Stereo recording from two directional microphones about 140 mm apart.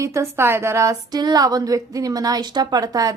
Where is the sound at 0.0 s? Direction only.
20° right (ahead or behind).